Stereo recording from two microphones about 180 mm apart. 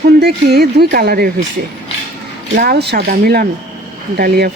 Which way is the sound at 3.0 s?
55° right (ahead or behind).